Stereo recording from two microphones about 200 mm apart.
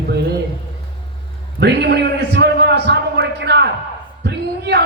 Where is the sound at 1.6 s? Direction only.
60° right (ahead or behind).